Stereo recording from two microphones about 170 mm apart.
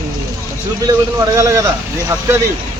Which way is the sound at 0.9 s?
20° right (ahead or behind).